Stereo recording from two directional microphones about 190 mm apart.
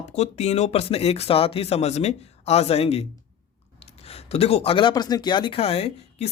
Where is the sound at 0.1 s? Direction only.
35° left (ahead or behind).